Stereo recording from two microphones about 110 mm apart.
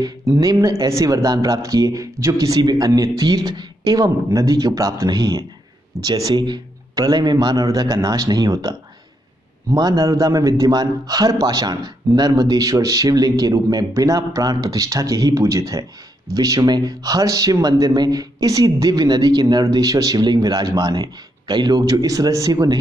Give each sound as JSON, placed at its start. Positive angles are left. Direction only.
{"t": 0.4, "sound": "a man's voice", "side_deg": -35}